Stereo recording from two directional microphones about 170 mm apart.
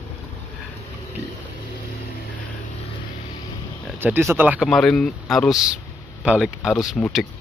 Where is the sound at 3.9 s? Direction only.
10° right (ahead or behind).